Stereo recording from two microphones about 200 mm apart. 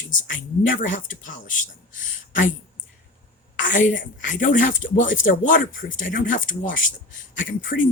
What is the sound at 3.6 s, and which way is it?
A woman's voice, 40° left (ahead or behind).